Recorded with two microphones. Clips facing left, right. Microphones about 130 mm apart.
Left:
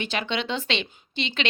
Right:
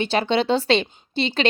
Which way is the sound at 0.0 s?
35° right (ahead or behind).